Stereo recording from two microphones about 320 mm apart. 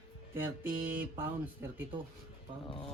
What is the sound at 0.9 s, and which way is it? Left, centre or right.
Speech, centre.